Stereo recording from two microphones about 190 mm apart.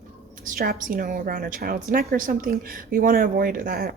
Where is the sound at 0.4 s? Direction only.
50° right (ahead or behind).